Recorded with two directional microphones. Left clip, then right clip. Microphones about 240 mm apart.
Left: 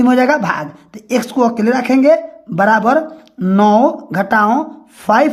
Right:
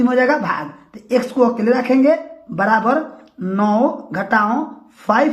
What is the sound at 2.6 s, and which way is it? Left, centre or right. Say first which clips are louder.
A woman's voice: left 4 dB; left.